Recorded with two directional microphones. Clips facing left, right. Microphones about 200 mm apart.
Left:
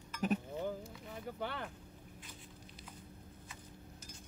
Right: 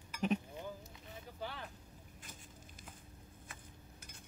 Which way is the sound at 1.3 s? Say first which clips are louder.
Left 5 dB; 60° left (ahead or behind).